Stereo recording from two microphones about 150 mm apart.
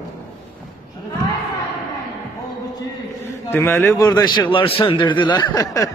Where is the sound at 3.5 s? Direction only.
15° left (ahead or behind).